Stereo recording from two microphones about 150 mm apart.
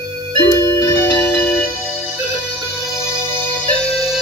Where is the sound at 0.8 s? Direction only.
25° left (ahead or behind).